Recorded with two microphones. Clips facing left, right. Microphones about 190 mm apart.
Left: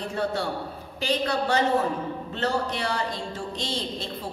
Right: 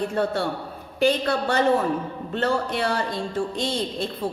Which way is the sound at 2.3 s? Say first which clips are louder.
Right 4 dB; 55° right (ahead or behind).